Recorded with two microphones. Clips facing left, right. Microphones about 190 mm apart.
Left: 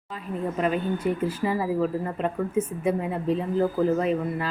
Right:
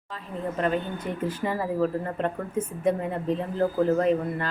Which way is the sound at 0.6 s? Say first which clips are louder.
Left 2 dB; 10° left (ahead or behind).